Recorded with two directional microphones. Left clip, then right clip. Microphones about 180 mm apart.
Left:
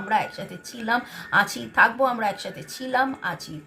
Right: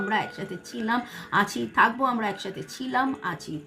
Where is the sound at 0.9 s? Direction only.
15° left (ahead or behind).